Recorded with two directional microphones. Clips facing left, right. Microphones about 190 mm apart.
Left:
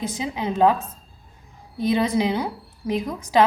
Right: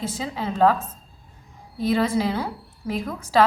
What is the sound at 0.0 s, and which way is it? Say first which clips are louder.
A woman's voice: left 2 dB; 15° left (ahead or behind).